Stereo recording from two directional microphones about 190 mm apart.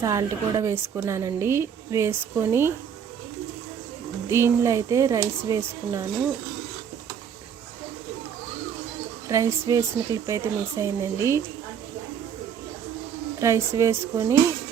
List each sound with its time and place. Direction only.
0.0 s a woman's voice: 15° right (ahead or behind)
4.3 s a woman's voice: 15° right (ahead or behind)
9.3 s a woman's voice: 15° right (ahead or behind)
13.4 s a woman's voice: 15° right (ahead or behind)